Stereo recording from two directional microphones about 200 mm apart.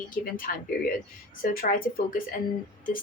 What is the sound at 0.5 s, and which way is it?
Speech, 45° left (ahead or behind).